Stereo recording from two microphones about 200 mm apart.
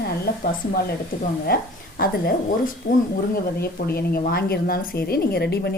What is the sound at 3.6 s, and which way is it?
A woman's voice, 50° left (ahead or behind).